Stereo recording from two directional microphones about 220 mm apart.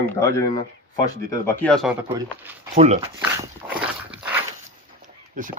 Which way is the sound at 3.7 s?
5° right (ahead or behind).